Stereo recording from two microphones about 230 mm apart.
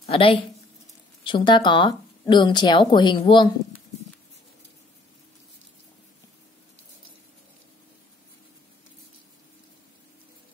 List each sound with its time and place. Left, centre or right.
0.0 s speech: left